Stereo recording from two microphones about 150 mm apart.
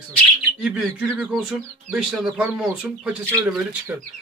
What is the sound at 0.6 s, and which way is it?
Speech, 5° right (ahead or behind).